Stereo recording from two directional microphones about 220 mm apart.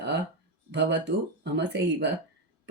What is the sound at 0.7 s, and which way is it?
Speech, 50° right (ahead or behind).